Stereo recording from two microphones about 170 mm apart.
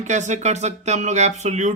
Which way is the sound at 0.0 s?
45° right (ahead or behind).